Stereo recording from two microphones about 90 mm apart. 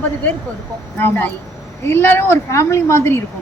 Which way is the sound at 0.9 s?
20° left (ahead or behind).